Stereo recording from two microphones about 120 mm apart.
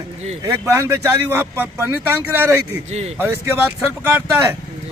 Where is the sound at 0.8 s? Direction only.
25° right (ahead or behind).